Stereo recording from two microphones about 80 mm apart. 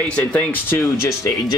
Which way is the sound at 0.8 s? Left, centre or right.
Left.